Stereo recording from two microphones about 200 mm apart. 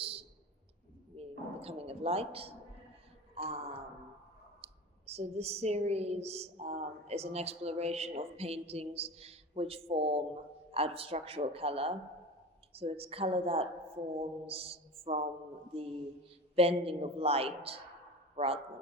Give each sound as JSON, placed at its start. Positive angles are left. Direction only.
{"t": 0.0, "sound": "clicking", "side_deg": -30}
{"t": 1.1, "sound": "a sound", "side_deg": -30}
{"t": 3.3, "sound": "a woman's voice", "side_deg": -30}
{"t": 16.6, "sound": "speech", "side_deg": -30}